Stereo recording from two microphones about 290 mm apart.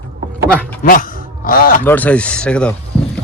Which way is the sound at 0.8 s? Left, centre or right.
Left.